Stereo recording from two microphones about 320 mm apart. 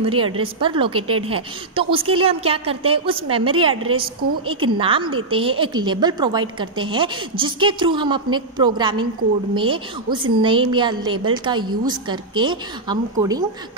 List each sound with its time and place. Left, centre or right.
0.0 s a woman's voice: centre
1.0 s speech: right
1.3 s a woman's voice: centre